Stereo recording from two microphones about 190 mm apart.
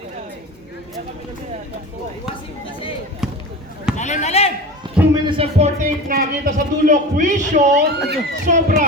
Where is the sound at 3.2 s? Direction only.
Centre (ahead or behind).